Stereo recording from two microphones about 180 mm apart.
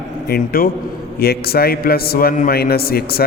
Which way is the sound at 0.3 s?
55° left (ahead or behind).